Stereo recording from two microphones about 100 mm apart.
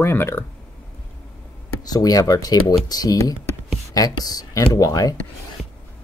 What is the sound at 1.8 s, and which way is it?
Speech, 40° left (ahead or behind).